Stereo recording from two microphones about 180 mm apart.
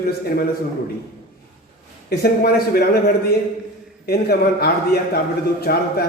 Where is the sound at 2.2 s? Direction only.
60° left (ahead or behind).